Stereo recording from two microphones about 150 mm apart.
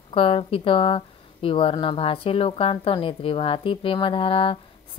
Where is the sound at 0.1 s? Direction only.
35° left (ahead or behind).